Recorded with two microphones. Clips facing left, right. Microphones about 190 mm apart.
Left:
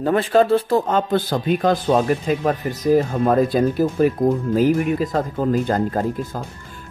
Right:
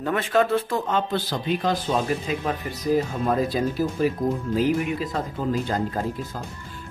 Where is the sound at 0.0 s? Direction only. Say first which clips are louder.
Left 6 dB; 35° left (ahead or behind).